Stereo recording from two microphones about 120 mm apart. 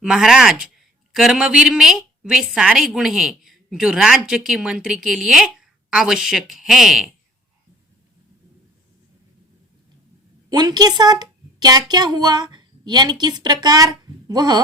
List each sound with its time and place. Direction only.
0.0 s a woman's voice: 5° right (ahead or behind)
10.5 s a woman's voice: 35° right (ahead or behind)